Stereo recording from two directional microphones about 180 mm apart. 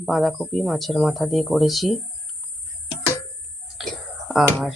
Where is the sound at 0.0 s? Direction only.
Centre (ahead or behind).